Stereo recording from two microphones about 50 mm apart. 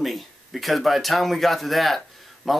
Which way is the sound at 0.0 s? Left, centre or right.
Centre.